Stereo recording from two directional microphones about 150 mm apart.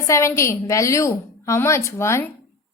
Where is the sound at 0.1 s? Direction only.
20° left (ahead or behind).